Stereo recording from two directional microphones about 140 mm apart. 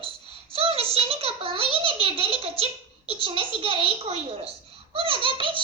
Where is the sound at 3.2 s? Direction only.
40° right (ahead or behind).